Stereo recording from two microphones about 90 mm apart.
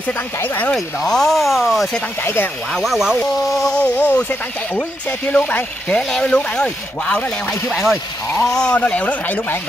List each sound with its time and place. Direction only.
0.0 s speech: 20° left (ahead or behind)
0.7 s speech: 5° left (ahead or behind)
2.2 s speech: 25° left (ahead or behind)
2.7 s speech: centre (ahead or behind)
7.6 s speech: centre (ahead or behind); by 9.6 s 20° left (ahead or behind)